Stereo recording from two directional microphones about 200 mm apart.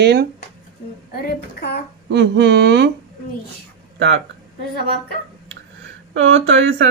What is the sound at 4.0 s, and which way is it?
Speech, 65° right (ahead or behind).